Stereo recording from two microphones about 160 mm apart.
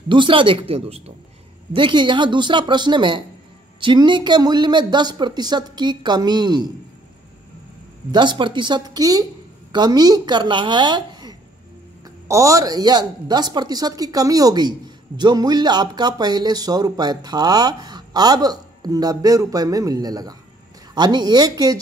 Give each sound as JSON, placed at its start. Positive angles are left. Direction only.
{"t": 0.1, "sound": "speech", "side_deg": -30}
{"t": 8.1, "sound": "speech", "side_deg": -30}